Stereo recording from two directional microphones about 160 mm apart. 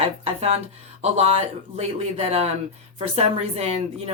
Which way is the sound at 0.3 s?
40° right (ahead or behind).